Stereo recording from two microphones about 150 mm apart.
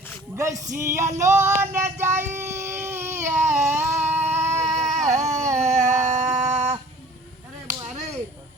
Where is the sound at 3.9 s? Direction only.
50° right (ahead or behind).